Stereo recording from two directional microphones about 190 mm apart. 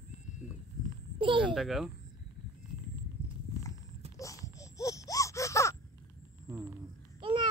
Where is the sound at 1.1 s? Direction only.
25° right (ahead or behind).